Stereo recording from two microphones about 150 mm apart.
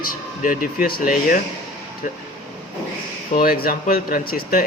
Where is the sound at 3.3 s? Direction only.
75° left (ahead or behind).